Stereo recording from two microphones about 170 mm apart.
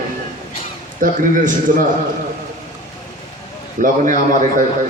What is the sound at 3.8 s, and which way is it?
Speech, 50° right (ahead or behind).